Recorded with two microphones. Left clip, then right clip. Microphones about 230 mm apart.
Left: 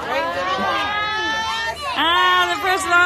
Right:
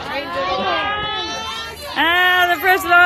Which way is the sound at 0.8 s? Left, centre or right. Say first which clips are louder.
Left 1 dB; centre.